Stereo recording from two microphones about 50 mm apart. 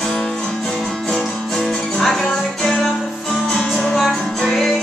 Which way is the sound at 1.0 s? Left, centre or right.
Centre.